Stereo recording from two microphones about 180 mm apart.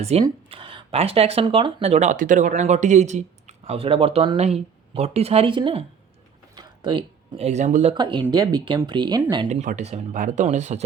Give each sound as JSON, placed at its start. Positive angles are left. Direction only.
{"t": 0.0, "sound": "speech", "side_deg": -35}
{"t": 7.9, "sound": "speech", "side_deg": -25}
{"t": 9.5, "sound": "speech", "side_deg": -40}